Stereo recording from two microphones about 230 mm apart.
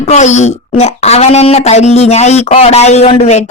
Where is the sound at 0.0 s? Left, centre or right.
Left.